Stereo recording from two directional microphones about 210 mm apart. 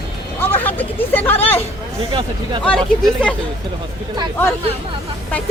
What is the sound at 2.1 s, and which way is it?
Speech, 25° right (ahead or behind).